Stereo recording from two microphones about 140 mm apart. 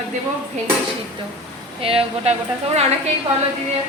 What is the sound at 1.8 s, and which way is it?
Speech, 40° right (ahead or behind).